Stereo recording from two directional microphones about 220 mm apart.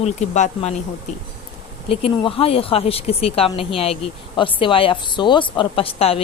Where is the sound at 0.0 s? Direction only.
35° left (ahead or behind).